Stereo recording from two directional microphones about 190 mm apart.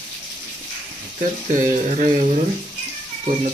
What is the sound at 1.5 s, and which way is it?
Speech, 40° right (ahead or behind).